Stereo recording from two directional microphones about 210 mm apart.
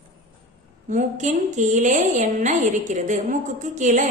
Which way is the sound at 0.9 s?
35° right (ahead or behind).